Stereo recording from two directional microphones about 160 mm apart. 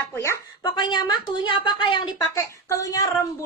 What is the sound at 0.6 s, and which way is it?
A woman's voice, 30° left (ahead or behind).